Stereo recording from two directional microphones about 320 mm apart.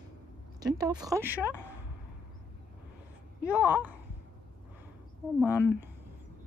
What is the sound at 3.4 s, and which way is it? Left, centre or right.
Speech, centre.